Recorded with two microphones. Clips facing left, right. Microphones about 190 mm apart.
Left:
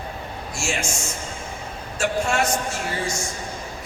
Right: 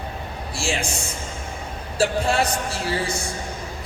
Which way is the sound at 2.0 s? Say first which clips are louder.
Right 2 dB; 35° right (ahead or behind).